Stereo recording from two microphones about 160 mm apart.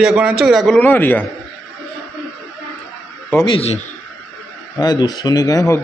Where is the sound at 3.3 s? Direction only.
15° left (ahead or behind).